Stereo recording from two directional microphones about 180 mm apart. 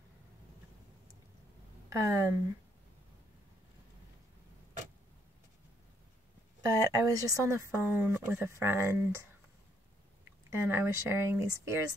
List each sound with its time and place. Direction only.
1.9 s speech: 15° right (ahead or behind)
6.6 s speech: 20° right (ahead or behind)
10.5 s speech: 15° right (ahead or behind)